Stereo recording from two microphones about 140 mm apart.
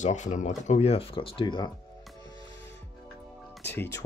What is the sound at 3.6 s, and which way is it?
Speech, 20° left (ahead or behind).